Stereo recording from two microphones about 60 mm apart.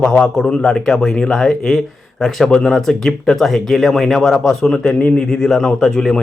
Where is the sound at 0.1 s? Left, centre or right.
Centre.